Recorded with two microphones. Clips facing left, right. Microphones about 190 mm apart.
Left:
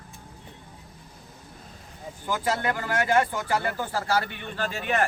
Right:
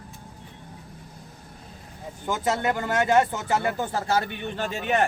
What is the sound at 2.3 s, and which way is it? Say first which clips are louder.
Speech: right 2 dB; 25° right (ahead or behind).